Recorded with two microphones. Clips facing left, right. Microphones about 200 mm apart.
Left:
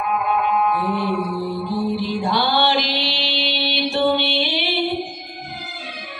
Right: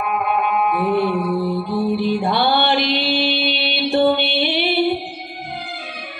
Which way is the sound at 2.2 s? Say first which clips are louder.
Right 2 dB; 55° right (ahead or behind).